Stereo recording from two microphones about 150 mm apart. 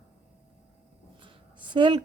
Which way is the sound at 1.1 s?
35° right (ahead or behind).